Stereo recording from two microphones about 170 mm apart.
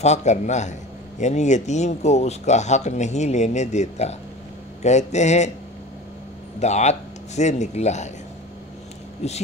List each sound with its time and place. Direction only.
0.0 s speech: 40° left (ahead or behind)
6.6 s speech: 40° left (ahead or behind)
9.2 s speech: 40° left (ahead or behind)